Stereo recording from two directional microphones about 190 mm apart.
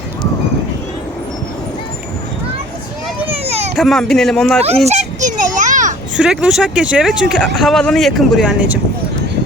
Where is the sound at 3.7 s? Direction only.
Centre (ahead or behind).